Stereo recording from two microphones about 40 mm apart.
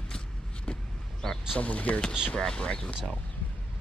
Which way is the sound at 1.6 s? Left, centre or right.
Left.